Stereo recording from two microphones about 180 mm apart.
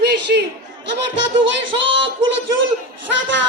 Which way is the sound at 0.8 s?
85° right.